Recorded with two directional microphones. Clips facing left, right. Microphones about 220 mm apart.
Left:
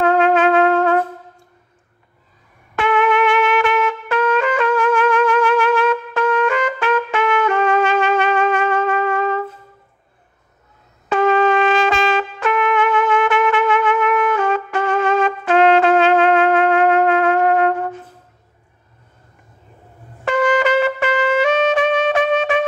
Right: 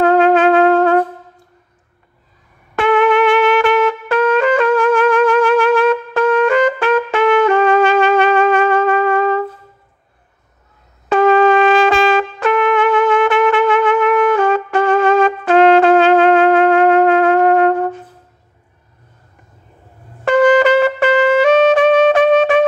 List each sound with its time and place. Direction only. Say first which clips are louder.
0.0 s trumpet: right 4 dB; 35° right (ahead or behind)
2.7 s trumpet: right 4 dB; 35° right (ahead or behind)
11.1 s music: right 4 dB; 35° right (ahead or behind)
11.7 s music: right 5 dB; 55° right (ahead or behind)
12.4 s trumpet: right 4 dB; 35° right (ahead or behind)
20.2 s trumpet: right 6 dB; 40° right (ahead or behind)